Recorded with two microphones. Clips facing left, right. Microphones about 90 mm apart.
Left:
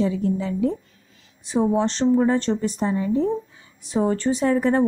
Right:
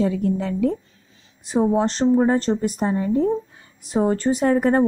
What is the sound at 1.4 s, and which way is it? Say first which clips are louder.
A woman's voice: right 1 dB; 40° right (ahead or behind).